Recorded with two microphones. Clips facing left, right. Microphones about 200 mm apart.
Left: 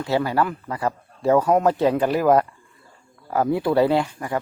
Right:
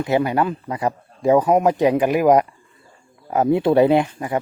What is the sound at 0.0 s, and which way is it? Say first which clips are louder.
Speech: right 3 dB; 20° right (ahead or behind).